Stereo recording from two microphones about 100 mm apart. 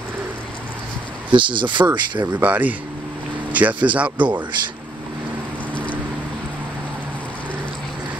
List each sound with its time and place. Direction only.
1.3 s speech: 55° right (ahead or behind)
2.2 s speech: 15° right (ahead or behind)